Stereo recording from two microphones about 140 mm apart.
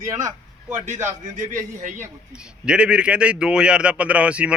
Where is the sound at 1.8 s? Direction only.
65° right (ahead or behind).